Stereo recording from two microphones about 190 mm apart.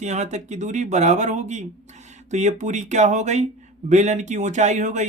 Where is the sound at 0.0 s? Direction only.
35° right (ahead or behind).